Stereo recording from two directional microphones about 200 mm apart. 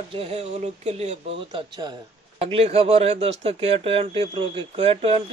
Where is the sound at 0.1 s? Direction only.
30° right (ahead or behind).